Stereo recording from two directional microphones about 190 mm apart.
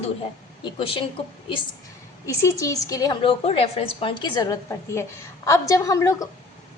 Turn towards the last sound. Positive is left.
turn(degrees=15)  # may be behind; listen again after turning